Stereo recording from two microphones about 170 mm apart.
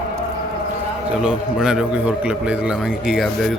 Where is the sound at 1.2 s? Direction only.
5° right (ahead or behind).